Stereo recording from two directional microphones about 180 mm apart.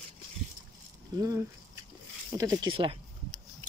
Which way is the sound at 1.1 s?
20° right (ahead or behind).